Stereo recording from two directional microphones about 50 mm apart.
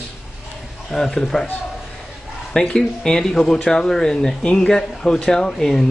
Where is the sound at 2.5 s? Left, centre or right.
Centre.